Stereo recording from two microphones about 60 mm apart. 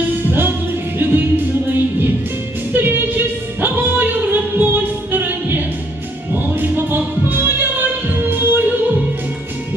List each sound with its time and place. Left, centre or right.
0.3 s music: right
2.7 s music: right